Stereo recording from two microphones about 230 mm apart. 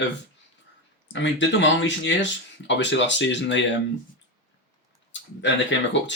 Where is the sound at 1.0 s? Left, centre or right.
Left.